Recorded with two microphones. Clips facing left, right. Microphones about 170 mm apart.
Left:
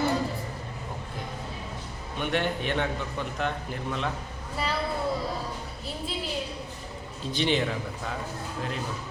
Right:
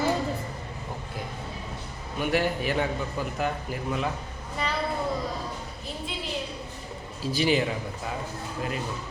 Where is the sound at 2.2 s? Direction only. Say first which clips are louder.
Right 2 dB; 5° right (ahead or behind).